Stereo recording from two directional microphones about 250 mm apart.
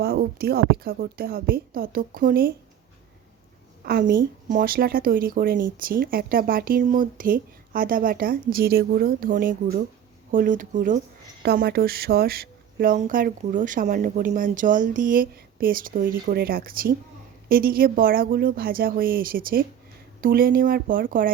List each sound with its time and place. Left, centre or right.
0.0 s a woman's voice: right
3.8 s a woman's voice: right